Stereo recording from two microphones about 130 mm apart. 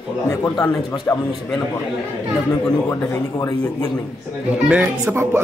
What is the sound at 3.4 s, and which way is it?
Speech, 30° left (ahead or behind).